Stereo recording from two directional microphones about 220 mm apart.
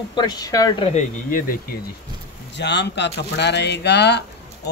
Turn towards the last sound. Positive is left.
turn(degrees=50)  # may be behind; listen again after turning